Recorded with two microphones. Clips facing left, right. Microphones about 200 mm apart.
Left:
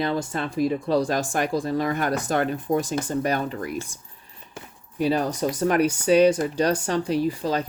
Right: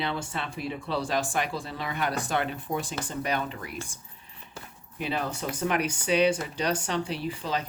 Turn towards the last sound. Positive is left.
turn(degrees=40)  # may be behind; listen again after turning